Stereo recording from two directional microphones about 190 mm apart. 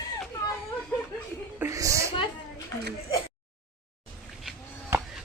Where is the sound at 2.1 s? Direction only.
25° left (ahead or behind).